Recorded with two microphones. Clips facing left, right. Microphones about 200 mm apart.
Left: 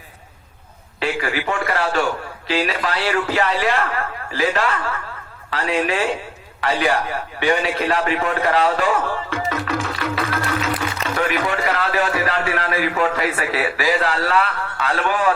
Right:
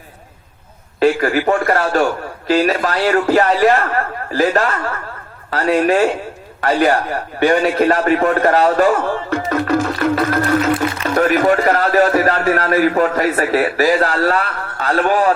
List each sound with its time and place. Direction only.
0.9 s a man's voice: 45° right (ahead or behind)